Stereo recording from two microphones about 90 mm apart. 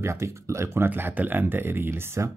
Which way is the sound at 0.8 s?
20° right (ahead or behind).